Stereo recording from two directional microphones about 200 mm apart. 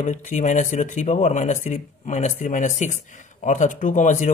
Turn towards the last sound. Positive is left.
turn(degrees=35)  # may be behind; listen again after turning